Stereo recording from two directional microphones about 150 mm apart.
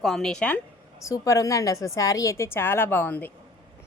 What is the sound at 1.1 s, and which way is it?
A woman's voice, 20° left (ahead or behind).